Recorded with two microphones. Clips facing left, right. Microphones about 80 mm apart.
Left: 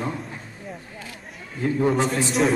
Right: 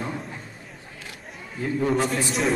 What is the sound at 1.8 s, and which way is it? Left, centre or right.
Speech, centre.